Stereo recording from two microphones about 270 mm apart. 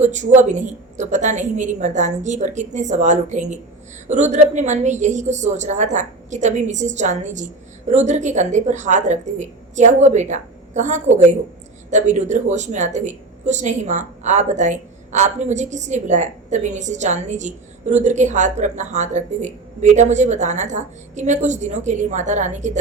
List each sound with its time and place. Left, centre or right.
0.0 s a woman's voice: right